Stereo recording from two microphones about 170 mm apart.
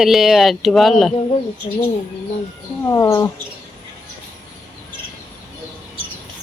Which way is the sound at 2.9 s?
15° left (ahead or behind).